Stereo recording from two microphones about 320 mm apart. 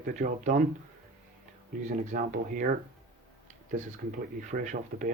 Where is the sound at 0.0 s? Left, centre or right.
Right.